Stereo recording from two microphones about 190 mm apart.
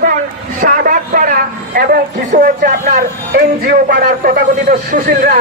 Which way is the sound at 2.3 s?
45° right (ahead or behind).